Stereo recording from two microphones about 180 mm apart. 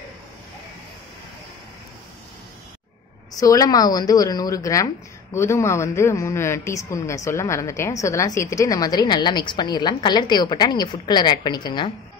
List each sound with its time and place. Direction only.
3.3 s speech: 20° left (ahead or behind)